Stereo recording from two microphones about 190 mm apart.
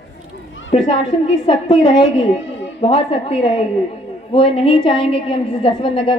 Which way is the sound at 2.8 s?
30° left (ahead or behind).